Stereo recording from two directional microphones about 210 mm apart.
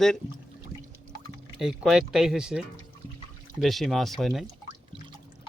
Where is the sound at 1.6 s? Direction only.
Centre (ahead or behind).